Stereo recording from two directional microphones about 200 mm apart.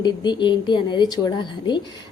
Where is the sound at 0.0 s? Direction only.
20° left (ahead or behind).